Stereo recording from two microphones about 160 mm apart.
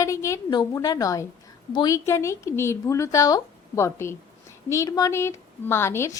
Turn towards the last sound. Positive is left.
turn(degrees=15)  # may be behind; listen again after turning